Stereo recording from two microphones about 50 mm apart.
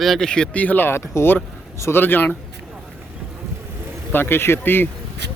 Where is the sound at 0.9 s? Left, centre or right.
Left.